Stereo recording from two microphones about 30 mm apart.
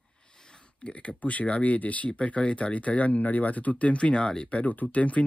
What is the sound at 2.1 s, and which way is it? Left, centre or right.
Speech, left.